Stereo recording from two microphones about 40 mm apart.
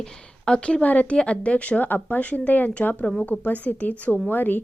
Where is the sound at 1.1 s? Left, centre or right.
Left.